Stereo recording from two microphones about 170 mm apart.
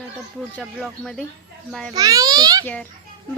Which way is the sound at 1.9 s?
20° right (ahead or behind).